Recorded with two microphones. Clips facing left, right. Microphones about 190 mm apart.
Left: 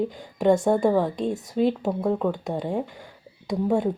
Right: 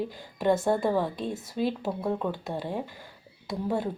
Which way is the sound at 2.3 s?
20° left (ahead or behind).